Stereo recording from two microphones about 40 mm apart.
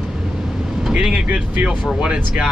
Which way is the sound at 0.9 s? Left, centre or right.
Right.